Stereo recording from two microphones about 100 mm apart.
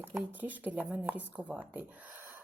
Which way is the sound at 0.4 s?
15° right (ahead or behind).